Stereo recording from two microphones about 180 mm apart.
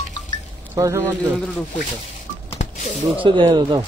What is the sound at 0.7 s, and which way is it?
Speech, 15° right (ahead or behind).